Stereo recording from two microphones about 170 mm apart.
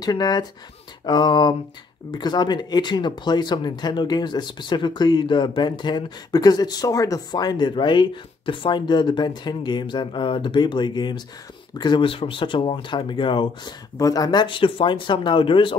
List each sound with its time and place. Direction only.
0.0 s speech: 20° left (ahead or behind)